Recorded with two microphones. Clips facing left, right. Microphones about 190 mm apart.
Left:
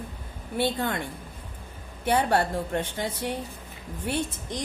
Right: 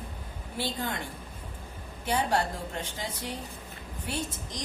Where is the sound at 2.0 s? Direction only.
60° left (ahead or behind).